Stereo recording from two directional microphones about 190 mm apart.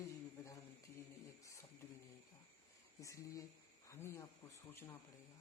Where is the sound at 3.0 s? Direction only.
15° left (ahead or behind).